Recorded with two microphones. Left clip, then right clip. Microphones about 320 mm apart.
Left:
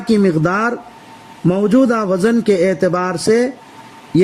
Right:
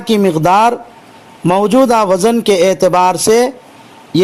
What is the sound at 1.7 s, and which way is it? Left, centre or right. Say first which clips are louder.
Speech: right 5 dB; right.